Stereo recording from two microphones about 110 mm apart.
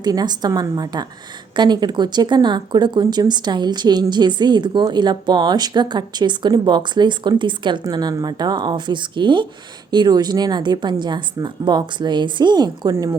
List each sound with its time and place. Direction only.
0.0 s a woman's voice: 40° right (ahead or behind)
12.9 s a woman's voice: 25° right (ahead or behind)